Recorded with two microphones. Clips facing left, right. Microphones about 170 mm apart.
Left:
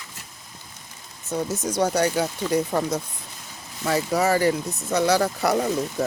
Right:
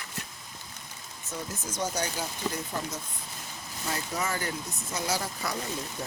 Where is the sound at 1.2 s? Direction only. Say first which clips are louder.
Left 11 dB; 75° left (ahead or behind).